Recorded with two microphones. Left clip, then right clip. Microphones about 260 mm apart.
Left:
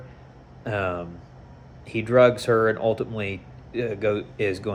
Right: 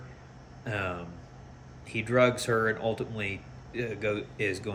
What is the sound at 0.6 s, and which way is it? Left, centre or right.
Speech, centre.